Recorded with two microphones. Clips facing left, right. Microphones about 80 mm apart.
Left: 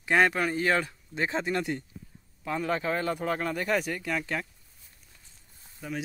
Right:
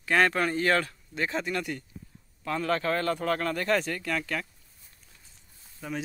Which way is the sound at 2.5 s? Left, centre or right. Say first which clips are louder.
Right 1 dB; centre.